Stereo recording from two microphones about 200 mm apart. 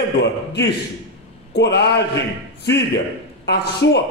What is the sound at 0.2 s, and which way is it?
A man's voice, 60° left (ahead or behind).